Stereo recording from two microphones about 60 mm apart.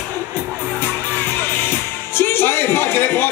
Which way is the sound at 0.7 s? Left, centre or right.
Left.